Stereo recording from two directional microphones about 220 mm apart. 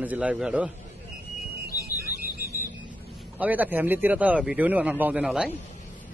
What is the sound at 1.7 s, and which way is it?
Music, 45° left (ahead or behind).